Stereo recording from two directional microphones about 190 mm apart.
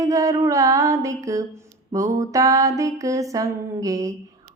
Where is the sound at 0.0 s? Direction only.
15° right (ahead or behind).